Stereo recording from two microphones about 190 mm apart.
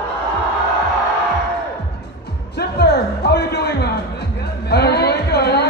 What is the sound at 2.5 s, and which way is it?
Music, 60° left (ahead or behind).